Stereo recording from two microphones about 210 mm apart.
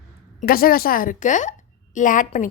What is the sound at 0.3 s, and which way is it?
A woman's voice, 45° left (ahead or behind).